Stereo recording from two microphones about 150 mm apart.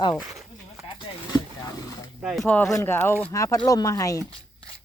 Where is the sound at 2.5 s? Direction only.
10° left (ahead or behind).